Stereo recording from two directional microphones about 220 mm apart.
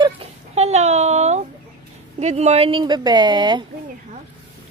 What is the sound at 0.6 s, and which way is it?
Speech, 30° right (ahead or behind).